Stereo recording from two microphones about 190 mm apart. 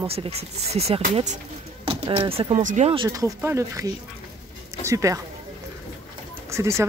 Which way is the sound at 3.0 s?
15° right (ahead or behind).